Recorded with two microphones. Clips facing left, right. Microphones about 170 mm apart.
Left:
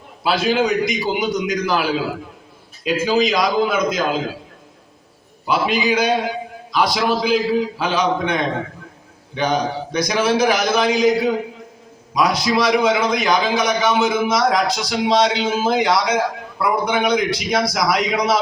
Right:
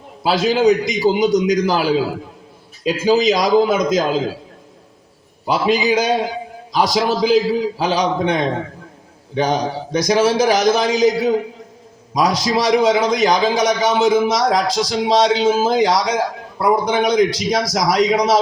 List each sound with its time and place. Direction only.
0.2 s a man's voice: 35° right (ahead or behind)
5.5 s a man's voice: 40° right (ahead or behind)